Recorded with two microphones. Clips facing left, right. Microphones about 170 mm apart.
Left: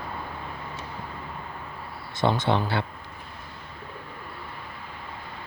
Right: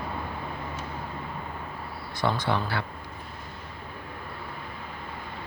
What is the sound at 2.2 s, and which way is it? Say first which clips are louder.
Speech: left 3 dB; 25° left (ahead or behind).